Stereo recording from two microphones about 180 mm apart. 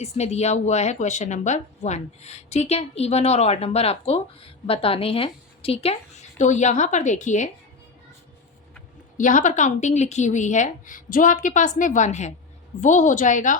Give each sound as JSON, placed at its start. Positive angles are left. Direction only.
{"t": 0.0, "sound": "speech", "side_deg": 35}
{"t": 9.1, "sound": "a woman's voice", "side_deg": 45}